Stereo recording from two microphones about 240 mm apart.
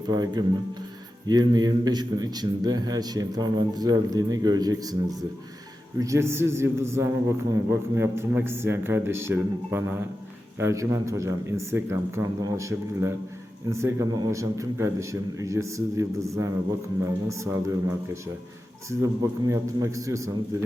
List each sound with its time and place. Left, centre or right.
0.1 s a man's voice: centre